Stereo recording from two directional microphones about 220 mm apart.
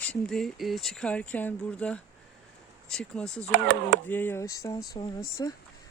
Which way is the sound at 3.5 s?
50° right (ahead or behind).